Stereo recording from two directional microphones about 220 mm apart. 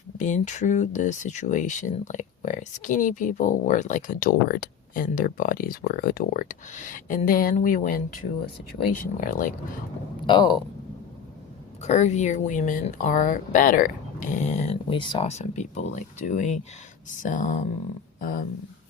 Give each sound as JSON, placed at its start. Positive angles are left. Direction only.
{"t": 0.2, "sound": "speech", "side_deg": 35}
{"t": 9.2, "sound": "speech", "side_deg": 35}
{"t": 10.2, "sound": "speech", "side_deg": 20}
{"t": 11.8, "sound": "speech", "side_deg": 30}